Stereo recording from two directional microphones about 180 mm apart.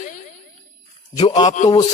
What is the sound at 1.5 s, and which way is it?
Speech, 40° left (ahead or behind).